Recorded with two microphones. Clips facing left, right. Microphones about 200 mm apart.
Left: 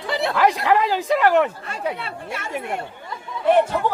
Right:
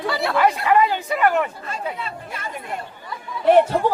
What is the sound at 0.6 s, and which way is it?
Speech, 85° left.